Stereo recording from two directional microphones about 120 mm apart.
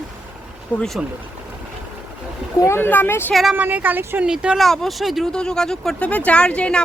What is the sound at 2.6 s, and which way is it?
Speech, 20° left (ahead or behind).